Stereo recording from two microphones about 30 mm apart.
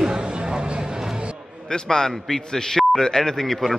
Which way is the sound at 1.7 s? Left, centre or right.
Left.